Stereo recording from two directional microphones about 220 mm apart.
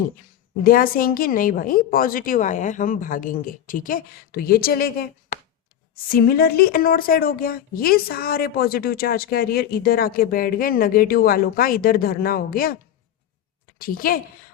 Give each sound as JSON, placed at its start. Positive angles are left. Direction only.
{"t": 0.6, "sound": "a woman's voice", "side_deg": 40}
{"t": 13.7, "sound": "a woman's voice", "side_deg": 40}